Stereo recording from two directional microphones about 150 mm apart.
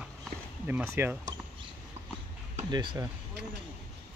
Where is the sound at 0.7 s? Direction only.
15° right (ahead or behind).